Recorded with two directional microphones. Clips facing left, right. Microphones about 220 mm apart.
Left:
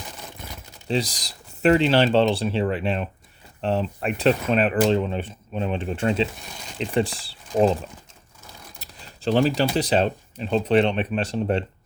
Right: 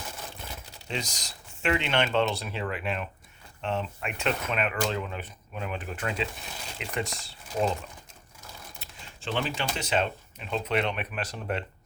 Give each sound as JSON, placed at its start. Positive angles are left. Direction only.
{"t": 0.9, "sound": "speech", "side_deg": 35}
{"t": 8.8, "sound": "keys jangling", "side_deg": 40}
{"t": 9.6, "sound": "speech", "side_deg": 35}